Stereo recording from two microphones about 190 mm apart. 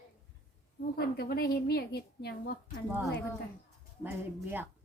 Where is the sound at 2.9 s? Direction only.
10° right (ahead or behind).